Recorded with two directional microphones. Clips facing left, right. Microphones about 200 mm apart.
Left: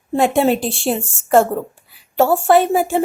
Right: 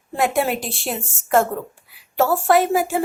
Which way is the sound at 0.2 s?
25° left (ahead or behind).